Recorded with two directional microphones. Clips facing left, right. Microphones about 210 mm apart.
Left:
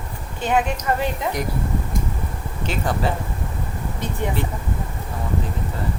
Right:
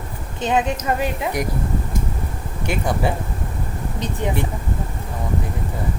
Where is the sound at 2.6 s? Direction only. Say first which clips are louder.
Right 2 dB; 15° right (ahead or behind).